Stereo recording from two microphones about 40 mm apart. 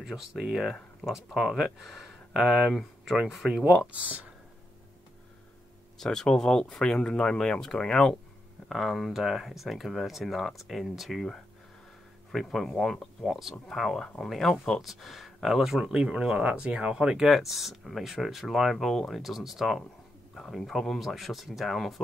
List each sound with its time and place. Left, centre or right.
0.1 s speech: centre
3.6 s speech: right
5.9 s speech: centre
8.6 s speech: centre
12.5 s speech: centre
15.8 s speech: right
17.3 s speech: centre